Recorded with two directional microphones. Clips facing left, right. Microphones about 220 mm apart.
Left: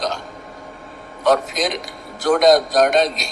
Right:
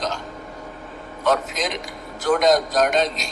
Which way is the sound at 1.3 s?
35° left (ahead or behind).